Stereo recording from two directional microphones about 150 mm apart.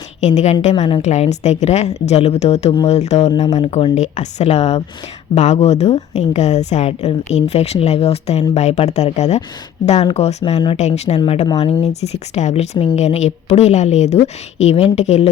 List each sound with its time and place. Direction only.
0.2 s a woman's voice: 50° left (ahead or behind)